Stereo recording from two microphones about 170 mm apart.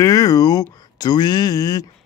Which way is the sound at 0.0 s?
20° left (ahead or behind).